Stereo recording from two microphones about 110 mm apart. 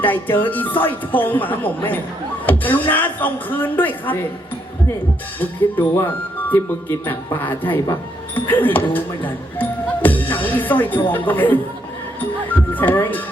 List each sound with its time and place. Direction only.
0.0 s speech: 15° left (ahead or behind)
2.5 s a sound: 15° left (ahead or behind)
2.9 s speech: 15° left (ahead or behind)
5.4 s speech: 15° left (ahead or behind)
8.4 s speech: 20° left (ahead or behind)
12.2 s music: 15° left (ahead or behind)